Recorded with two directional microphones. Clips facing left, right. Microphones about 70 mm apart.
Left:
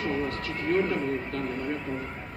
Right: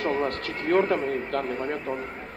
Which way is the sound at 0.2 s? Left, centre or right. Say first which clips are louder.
Right 3 dB; right.